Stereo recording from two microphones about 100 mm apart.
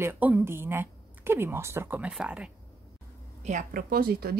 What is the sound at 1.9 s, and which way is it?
Speech, 10° right (ahead or behind).